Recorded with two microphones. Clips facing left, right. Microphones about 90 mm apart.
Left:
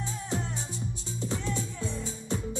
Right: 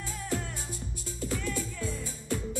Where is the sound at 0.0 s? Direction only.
20° left (ahead or behind).